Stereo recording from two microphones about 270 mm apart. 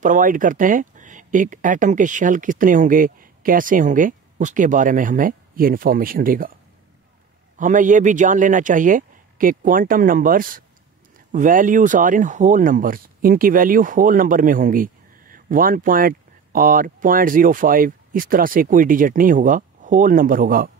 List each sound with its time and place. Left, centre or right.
0.0 s speech: right
7.5 s speech: right